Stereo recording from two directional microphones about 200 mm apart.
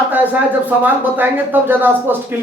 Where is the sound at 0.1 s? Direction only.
10° right (ahead or behind).